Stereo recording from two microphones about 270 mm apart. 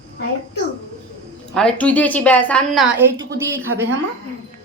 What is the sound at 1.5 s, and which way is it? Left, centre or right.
A woman's voice, centre.